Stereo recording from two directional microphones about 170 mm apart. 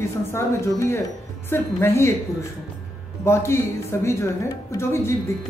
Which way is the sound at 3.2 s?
15° left (ahead or behind).